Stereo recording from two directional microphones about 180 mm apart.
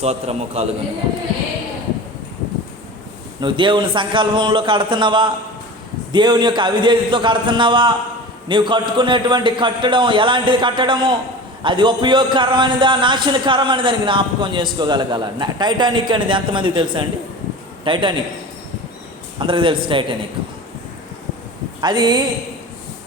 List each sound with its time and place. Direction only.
0.0 s a man's voice: 35° right (ahead or behind)
3.4 s a man's voice: 25° right (ahead or behind)
19.4 s a man's voice: 30° right (ahead or behind)
21.8 s a man's voice: 25° right (ahead or behind)